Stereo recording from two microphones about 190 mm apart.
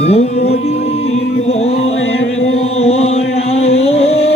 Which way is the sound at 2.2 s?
90° left.